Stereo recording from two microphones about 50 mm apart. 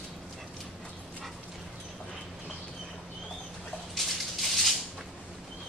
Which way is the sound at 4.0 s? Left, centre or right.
Centre.